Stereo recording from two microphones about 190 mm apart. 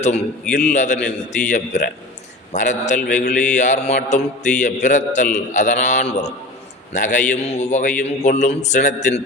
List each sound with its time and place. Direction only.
0.5 s a man's voice: 40° left (ahead or behind)